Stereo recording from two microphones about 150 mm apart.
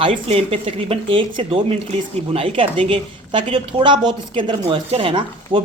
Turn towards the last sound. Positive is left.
turn(degrees=-35)  # may be behind; listen again after turning